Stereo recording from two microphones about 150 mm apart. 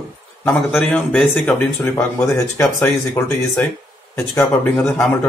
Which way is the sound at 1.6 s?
15° left (ahead or behind).